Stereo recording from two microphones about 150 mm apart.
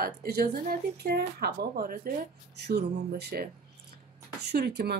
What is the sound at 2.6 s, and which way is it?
Speech, 90° right.